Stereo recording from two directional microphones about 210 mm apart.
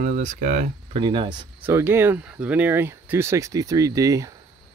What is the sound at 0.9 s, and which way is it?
Speech, 25° right (ahead or behind).